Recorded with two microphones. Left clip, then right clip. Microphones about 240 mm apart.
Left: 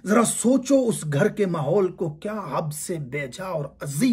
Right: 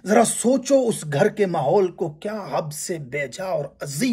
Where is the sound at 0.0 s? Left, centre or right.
Centre.